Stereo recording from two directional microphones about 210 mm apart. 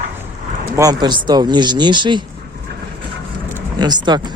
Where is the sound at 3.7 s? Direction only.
20° right (ahead or behind).